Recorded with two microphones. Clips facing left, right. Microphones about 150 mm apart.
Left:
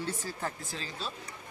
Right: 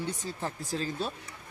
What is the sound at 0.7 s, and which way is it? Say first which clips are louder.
Speech: right 8 dB; 45° right (ahead or behind).